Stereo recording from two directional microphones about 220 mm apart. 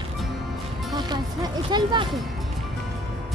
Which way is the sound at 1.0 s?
20° right (ahead or behind).